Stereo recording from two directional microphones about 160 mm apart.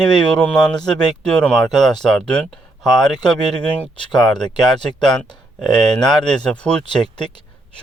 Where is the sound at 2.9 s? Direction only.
25° left (ahead or behind).